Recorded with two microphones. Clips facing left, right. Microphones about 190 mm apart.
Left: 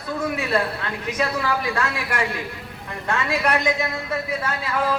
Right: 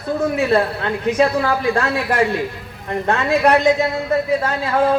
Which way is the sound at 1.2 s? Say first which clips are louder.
Right 6 dB; 50° right (ahead or behind).